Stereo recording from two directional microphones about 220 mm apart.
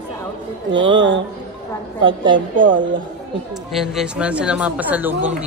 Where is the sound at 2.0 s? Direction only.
20° right (ahead or behind).